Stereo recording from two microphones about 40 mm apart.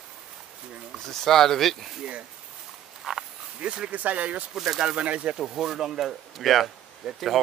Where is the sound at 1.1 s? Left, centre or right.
Centre.